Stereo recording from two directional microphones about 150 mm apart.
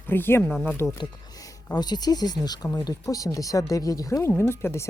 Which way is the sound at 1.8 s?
25° left (ahead or behind).